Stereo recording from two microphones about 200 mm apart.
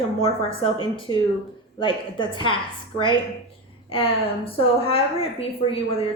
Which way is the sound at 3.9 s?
30° left (ahead or behind).